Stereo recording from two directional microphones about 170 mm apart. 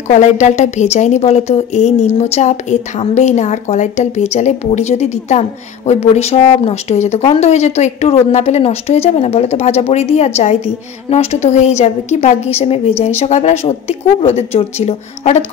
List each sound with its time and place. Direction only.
0.1 s a woman's voice: 45° left (ahead or behind)